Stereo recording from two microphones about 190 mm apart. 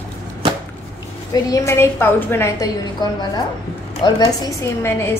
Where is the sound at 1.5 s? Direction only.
15° left (ahead or behind).